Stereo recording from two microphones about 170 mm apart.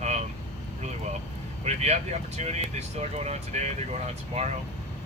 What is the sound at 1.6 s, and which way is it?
Speech, 40° right (ahead or behind).